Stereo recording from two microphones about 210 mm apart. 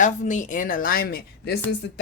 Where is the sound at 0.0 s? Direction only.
35° left (ahead or behind).